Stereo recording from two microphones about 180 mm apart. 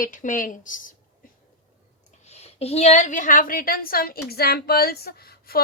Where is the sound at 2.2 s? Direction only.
35° left (ahead or behind).